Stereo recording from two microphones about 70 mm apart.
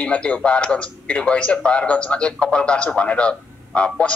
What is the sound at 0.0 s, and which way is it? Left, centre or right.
A man's voice, centre.